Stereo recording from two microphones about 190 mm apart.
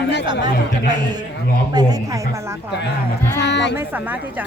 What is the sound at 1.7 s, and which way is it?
Speech, 20° right (ahead or behind).